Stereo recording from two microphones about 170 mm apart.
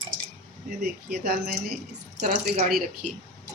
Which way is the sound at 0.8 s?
65° right (ahead or behind).